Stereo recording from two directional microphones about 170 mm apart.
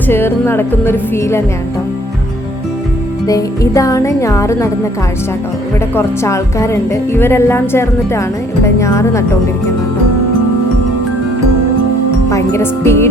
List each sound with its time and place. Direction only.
0.1 s speech: 15° left (ahead or behind)
3.2 s speech: 20° left (ahead or behind)
5.9 s speech: 15° left (ahead or behind)
12.3 s speech: 15° left (ahead or behind)